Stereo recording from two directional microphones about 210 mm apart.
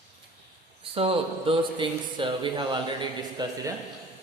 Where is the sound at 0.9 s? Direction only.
25° right (ahead or behind).